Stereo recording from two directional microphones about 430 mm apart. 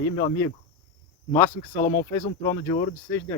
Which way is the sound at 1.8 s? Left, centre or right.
Left.